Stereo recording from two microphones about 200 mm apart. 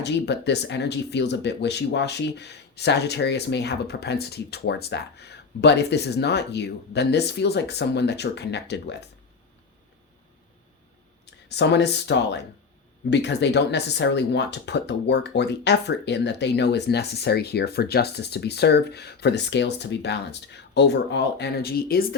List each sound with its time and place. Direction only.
0.0 s speech: 60° left (ahead or behind)
11.4 s speech: 60° left (ahead or behind)